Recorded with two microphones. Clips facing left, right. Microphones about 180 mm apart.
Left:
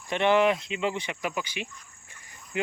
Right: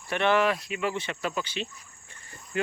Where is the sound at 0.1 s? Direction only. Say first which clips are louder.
Left 2 dB; 20° left (ahead or behind).